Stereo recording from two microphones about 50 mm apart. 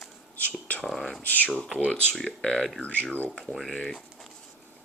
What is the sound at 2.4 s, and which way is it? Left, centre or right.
Speech, centre.